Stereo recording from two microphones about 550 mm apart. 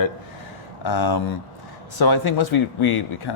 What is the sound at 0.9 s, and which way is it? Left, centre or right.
Speech, left.